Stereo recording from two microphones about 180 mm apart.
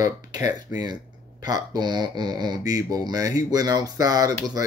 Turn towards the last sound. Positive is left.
turn(degrees=-20)  # may be behind; listen again after turning